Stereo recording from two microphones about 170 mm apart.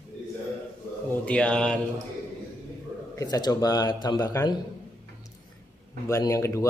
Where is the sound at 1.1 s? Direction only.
10° left (ahead or behind).